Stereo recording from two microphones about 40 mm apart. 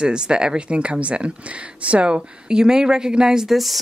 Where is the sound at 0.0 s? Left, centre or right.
Right.